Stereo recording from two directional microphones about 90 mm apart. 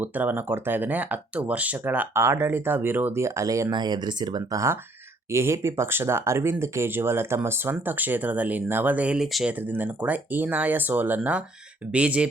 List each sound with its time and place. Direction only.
0.0 s speech: 20° right (ahead or behind)
2.1 s speech: 30° right (ahead or behind)
3.7 s speech: 50° right (ahead or behind)
5.3 s speech: 30° right (ahead or behind); by 9.5 s 5° right (ahead or behind)
9.5 s speech: 20° right (ahead or behind)